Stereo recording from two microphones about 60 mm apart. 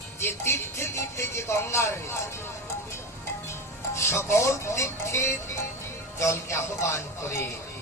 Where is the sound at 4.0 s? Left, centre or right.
Left.